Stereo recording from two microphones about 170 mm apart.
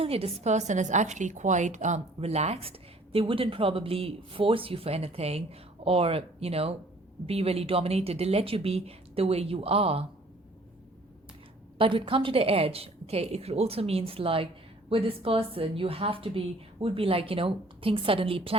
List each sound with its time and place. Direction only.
0.0 s a woman's voice: 35° right (ahead or behind)
11.8 s a woman's voice: 30° right (ahead or behind)